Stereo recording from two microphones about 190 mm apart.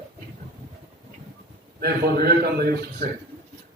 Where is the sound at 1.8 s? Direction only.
55° right (ahead or behind).